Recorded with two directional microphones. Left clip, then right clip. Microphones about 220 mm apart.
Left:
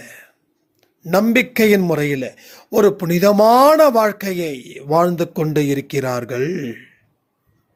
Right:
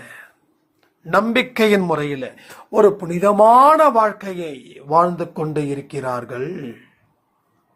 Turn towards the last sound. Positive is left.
turn(degrees=50)  # may be behind; listen again after turning